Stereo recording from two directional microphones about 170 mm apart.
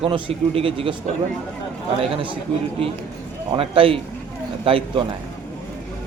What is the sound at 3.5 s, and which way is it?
Speech, 30° right (ahead or behind).